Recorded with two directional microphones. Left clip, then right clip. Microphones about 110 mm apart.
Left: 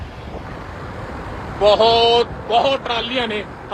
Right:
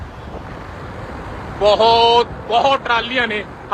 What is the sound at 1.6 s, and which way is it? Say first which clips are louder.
Speech: right 1 dB; 50° right (ahead or behind).